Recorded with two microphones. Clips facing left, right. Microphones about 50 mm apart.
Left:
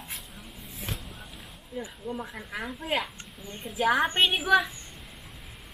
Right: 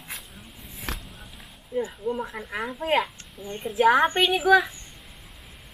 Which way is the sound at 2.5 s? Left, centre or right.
Right.